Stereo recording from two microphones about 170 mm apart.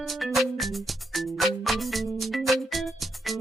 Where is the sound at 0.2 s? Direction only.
Centre (ahead or behind).